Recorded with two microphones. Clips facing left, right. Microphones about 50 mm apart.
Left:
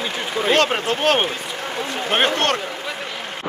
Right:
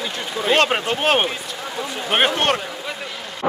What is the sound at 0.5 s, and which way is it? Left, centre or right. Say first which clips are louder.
Speech: right 1 dB; centre.